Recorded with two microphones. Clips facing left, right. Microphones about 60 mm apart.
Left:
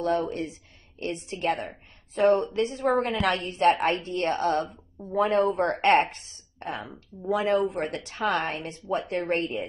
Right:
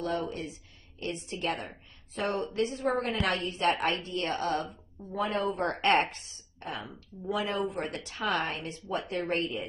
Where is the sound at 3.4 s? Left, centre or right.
Left.